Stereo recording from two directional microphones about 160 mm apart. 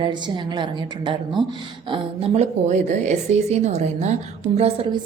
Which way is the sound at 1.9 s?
40° right (ahead or behind).